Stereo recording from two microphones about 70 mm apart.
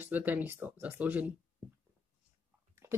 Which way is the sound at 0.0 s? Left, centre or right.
Right.